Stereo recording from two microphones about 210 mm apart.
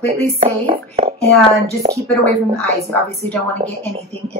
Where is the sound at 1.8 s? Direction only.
35° right (ahead or behind).